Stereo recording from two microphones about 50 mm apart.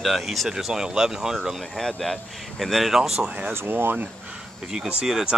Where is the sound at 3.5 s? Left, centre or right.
Right.